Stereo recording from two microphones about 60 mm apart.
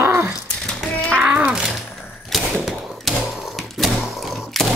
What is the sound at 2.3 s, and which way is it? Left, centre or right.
Typewriter, centre.